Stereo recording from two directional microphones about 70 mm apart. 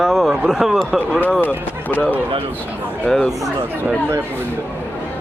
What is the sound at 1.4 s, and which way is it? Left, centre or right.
Speech, left.